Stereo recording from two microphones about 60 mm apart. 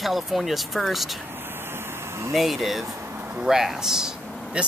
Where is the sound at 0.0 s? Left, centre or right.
Centre.